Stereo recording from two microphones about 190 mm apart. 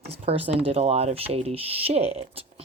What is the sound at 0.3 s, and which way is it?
Speech, 30° right (ahead or behind).